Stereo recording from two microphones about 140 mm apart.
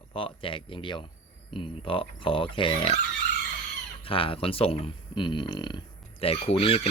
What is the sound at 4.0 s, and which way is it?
Speech, 40° left (ahead or behind).